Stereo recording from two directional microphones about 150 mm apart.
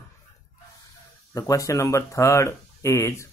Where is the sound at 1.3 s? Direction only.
25° left (ahead or behind).